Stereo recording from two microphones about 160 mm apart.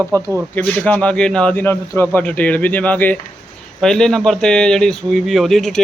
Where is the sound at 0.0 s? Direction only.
15° left (ahead or behind).